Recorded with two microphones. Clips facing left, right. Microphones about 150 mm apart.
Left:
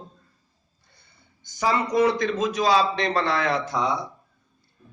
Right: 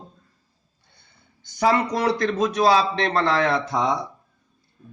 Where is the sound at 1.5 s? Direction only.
65° right (ahead or behind).